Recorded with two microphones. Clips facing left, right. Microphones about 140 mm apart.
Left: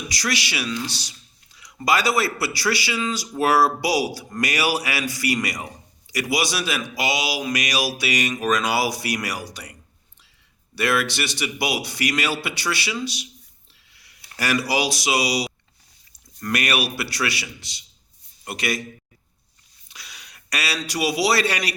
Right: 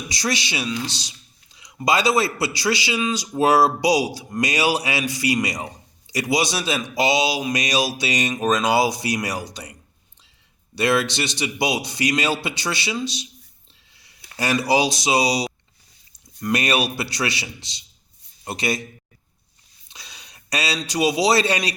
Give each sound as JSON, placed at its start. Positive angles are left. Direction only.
{"t": 0.1, "sound": "a man's voice", "side_deg": -25}
{"t": 10.8, "sound": "a man's voice", "side_deg": -25}
{"t": 19.9, "sound": "a man's voice", "side_deg": -25}